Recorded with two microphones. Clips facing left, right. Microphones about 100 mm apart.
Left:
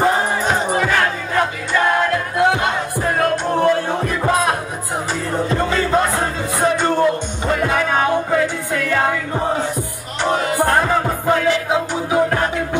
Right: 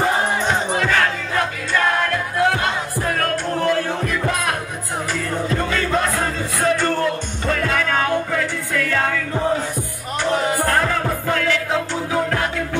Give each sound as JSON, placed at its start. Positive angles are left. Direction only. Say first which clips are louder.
{"t": 0.4, "sound": "music", "louder": "left 2 dB", "side_deg": 10}